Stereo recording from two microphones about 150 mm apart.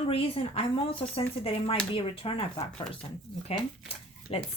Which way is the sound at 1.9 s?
40° left (ahead or behind).